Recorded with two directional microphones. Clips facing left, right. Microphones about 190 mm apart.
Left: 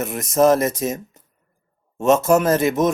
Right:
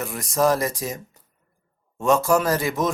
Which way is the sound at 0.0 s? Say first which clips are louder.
Left 5 dB; 20° left (ahead or behind).